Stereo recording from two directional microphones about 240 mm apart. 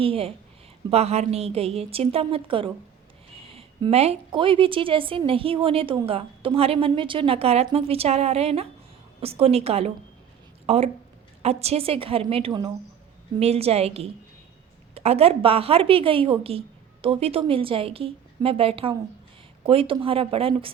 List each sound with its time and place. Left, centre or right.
0.0 s a woman's voice: right